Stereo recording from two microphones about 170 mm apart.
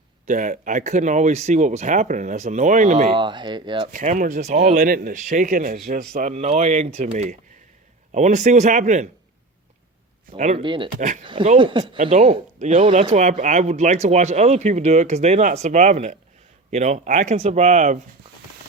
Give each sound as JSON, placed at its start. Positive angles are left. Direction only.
{"t": 0.3, "sound": "speech", "side_deg": -45}
{"t": 3.2, "sound": "speech", "side_deg": -25}
{"t": 3.9, "sound": "speech", "side_deg": -50}
{"t": 4.9, "sound": "speech", "side_deg": -50}
{"t": 6.3, "sound": "speech", "side_deg": -40}
{"t": 10.3, "sound": "speech", "side_deg": -45}
{"t": 10.6, "sound": "speech", "side_deg": -30}
{"t": 10.9, "sound": "speech", "side_deg": -45}
{"t": 11.2, "sound": "speech", "side_deg": -30}